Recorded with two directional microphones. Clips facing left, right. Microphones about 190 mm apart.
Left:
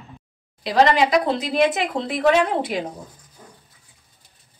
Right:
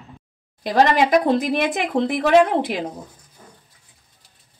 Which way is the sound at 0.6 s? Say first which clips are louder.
Even; 50° right (ahead or behind).